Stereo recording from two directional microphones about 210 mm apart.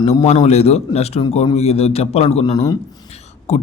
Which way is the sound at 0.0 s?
30° left (ahead or behind).